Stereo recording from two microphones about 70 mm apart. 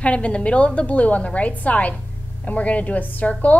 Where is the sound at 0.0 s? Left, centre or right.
Centre.